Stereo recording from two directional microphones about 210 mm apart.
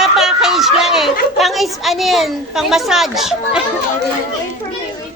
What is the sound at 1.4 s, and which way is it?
A woman's voice, centre (ahead or behind).